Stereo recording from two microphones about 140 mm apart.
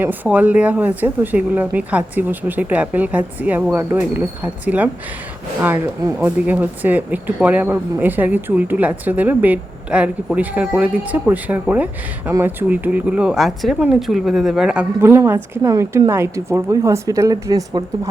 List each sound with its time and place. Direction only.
0.0 s speech: 10° right (ahead or behind)
15.0 s a woman's voice: 15° right (ahead or behind)